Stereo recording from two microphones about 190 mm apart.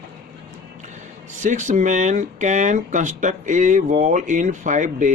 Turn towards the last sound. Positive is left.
turn(degrees=-40)  # may be behind; listen again after turning